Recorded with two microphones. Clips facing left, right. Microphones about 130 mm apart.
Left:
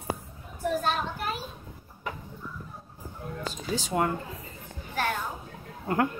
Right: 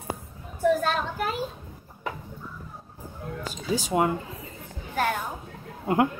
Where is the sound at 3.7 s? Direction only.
10° right (ahead or behind).